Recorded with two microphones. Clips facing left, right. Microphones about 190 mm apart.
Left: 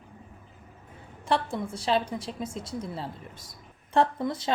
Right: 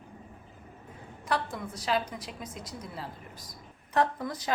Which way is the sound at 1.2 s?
30° left (ahead or behind).